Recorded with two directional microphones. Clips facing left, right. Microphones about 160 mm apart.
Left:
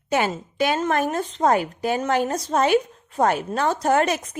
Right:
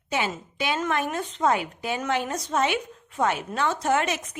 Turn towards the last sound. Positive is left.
turn(degrees=40)  # may be behind; listen again after turning